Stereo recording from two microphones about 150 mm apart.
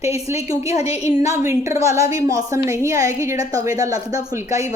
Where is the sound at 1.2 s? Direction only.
20° right (ahead or behind).